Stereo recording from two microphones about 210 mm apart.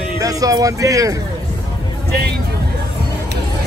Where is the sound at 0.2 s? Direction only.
15° right (ahead or behind).